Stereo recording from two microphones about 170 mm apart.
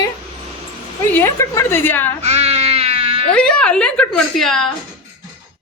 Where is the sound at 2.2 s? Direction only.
40° right (ahead or behind).